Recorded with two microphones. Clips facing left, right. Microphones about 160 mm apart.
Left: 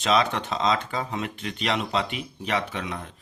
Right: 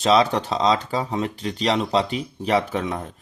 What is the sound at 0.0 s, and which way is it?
Speech, 35° right (ahead or behind).